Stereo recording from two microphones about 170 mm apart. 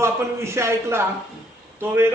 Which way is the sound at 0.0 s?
15° right (ahead or behind).